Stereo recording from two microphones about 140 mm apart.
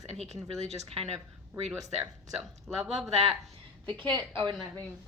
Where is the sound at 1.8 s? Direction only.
25° right (ahead or behind).